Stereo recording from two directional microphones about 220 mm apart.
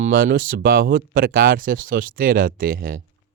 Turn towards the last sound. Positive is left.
turn(degrees=-40)  # may be behind; listen again after turning